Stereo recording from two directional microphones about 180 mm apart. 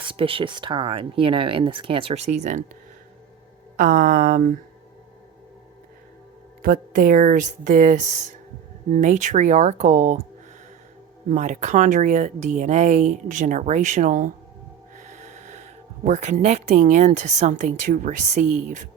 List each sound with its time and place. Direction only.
0.1 s speech: 30° right (ahead or behind)
3.8 s speech: 50° right (ahead or behind)
6.6 s speech: 50° right (ahead or behind)
11.3 s speech: 40° right (ahead or behind)